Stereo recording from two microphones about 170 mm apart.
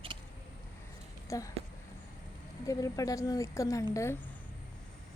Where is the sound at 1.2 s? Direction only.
20° left (ahead or behind).